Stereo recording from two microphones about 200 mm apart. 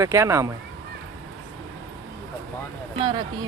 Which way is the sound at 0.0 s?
15° right (ahead or behind).